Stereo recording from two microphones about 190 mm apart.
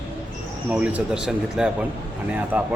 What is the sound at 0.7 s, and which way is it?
Speech, 5° right (ahead or behind).